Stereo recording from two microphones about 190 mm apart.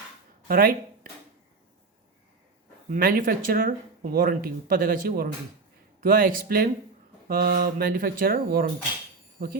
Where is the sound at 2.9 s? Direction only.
45° right (ahead or behind).